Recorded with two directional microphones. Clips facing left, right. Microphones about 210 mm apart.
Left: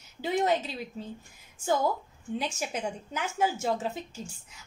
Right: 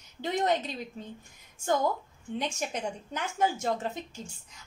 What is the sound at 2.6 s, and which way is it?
A woman's voice, 5° left (ahead or behind).